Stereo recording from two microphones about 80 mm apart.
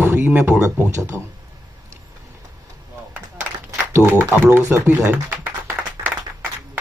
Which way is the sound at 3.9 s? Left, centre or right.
Right.